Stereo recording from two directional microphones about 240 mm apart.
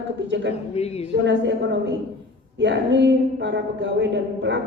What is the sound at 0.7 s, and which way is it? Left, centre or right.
Speech, left.